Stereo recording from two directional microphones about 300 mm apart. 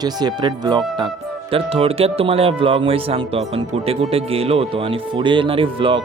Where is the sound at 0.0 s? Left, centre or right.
Centre.